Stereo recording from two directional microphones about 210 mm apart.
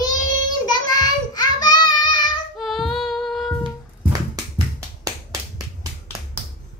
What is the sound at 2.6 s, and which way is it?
Female singing, centre (ahead or behind).